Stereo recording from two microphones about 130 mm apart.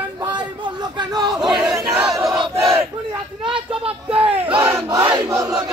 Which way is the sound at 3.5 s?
45° right (ahead or behind).